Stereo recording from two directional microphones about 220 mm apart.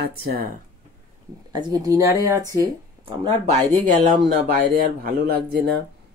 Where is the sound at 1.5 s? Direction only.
20° right (ahead or behind).